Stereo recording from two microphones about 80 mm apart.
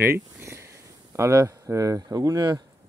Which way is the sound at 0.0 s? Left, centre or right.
Right.